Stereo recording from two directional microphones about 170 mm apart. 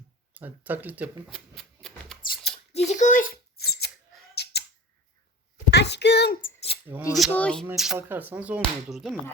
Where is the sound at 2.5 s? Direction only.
40° left (ahead or behind); by 3.9 s 70° left (ahead or behind).